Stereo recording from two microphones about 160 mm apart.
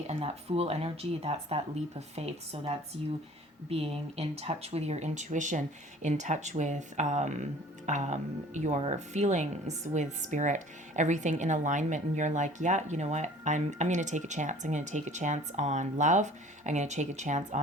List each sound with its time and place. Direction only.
0.1 s speech: 40° right (ahead or behind)